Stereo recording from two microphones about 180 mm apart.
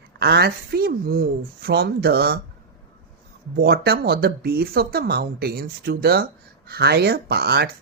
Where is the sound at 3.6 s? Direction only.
65° right (ahead or behind).